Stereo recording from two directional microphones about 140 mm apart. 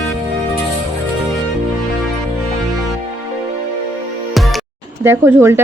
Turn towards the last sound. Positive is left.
turn(degrees=-15)  # may be behind; listen again after turning